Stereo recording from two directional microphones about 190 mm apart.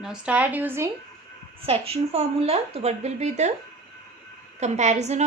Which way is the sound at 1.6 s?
30° right (ahead or behind).